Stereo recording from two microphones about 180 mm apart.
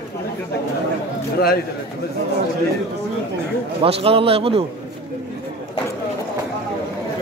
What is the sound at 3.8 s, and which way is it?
Speech, 30° right (ahead or behind).